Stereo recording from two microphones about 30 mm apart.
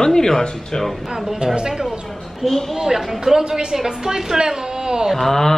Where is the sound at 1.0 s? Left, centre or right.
Centre.